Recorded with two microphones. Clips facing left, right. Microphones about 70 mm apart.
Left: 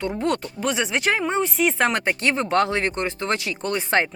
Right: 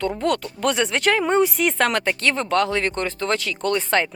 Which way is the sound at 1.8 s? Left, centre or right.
Left.